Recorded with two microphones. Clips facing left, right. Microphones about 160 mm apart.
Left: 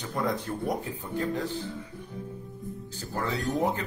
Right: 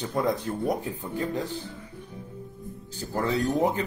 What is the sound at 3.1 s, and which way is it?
Speech, 15° right (ahead or behind).